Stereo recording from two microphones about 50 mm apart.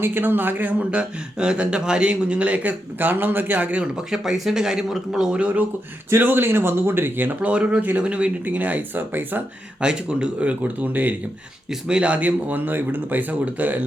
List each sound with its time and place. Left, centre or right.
0.0 s speech: right
3.0 s speech: right
3.9 s speech: centre
5.3 s speech: right
6.1 s speech: right
7.4 s speech: right
7.8 s speech: right
8.4 s speech: right
9.8 s speech: centre; by 11.1 s right
11.9 s speech: right